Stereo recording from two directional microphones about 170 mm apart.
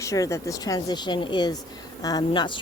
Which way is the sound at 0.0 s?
20° left (ahead or behind).